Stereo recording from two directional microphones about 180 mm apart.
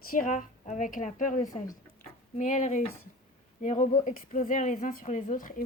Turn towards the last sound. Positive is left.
turn(degrees=45)  # may be behind; listen again after turning